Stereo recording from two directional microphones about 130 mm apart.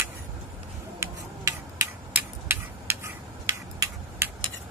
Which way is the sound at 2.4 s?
15° right (ahead or behind).